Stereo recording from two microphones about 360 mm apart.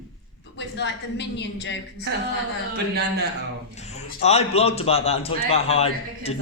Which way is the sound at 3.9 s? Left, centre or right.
Centre.